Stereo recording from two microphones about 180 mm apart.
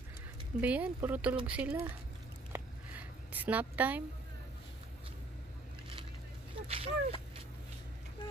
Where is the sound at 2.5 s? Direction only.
10° right (ahead or behind).